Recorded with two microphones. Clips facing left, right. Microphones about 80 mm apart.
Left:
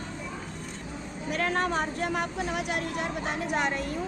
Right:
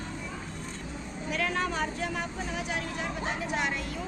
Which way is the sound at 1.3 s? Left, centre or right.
Left.